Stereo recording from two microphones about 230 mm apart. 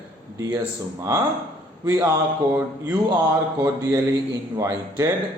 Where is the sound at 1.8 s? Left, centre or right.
Centre.